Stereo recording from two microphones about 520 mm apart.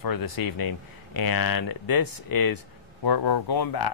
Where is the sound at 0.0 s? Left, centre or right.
Left.